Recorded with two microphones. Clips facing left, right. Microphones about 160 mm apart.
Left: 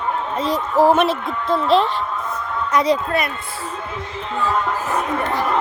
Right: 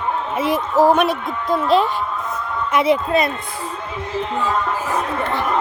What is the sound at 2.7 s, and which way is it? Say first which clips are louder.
Speech: right 1 dB; 25° right (ahead or behind).